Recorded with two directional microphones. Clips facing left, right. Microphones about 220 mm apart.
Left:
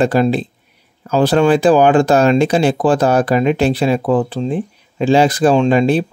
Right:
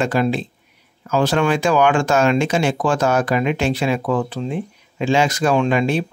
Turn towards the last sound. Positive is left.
turn(degrees=35)  # may be behind; listen again after turning